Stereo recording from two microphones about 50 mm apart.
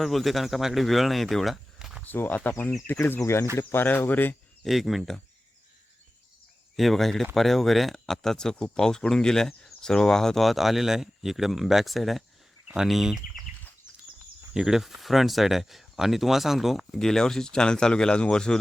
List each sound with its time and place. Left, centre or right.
0.0 s speech: centre
2.0 s speech: left
4.6 s speech: centre
6.7 s speech: centre
14.5 s speech: centre